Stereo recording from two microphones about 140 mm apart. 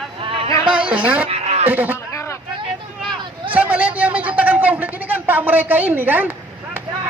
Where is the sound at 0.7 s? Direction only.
10° right (ahead or behind).